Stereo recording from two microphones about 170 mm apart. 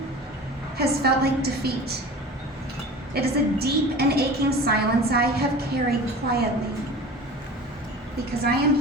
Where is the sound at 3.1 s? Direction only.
70° right (ahead or behind).